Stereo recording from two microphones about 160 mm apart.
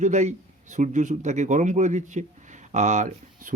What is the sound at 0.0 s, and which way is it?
Speech, 45° right (ahead or behind).